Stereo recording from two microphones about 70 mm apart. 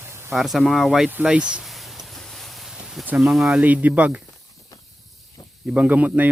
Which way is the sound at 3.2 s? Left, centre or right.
Centre.